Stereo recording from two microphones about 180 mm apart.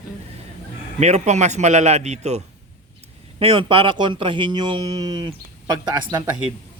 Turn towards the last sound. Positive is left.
turn(degrees=-25)  # may be behind; listen again after turning